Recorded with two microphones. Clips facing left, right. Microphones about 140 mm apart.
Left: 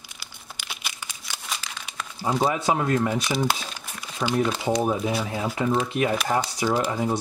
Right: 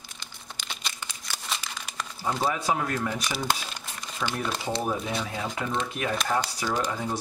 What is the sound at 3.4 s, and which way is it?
Crumpling, 10° left (ahead or behind).